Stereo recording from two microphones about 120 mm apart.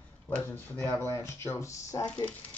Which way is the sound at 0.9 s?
20° left (ahead or behind).